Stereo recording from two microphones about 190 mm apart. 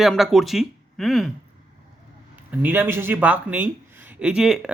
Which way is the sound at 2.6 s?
10° right (ahead or behind).